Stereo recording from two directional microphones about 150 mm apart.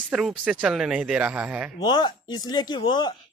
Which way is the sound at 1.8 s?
30° left (ahead or behind).